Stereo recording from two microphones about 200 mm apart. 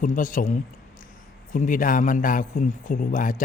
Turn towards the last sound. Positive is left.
turn(degrees=40)  # may be behind; listen again after turning